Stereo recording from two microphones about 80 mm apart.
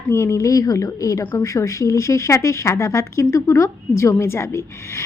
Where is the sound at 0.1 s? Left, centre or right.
Left.